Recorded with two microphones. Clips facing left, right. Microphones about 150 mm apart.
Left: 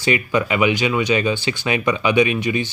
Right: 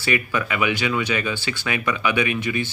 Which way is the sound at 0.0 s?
20° left (ahead or behind).